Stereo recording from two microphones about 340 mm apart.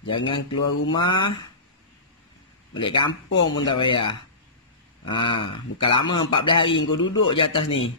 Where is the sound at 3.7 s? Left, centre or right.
Centre.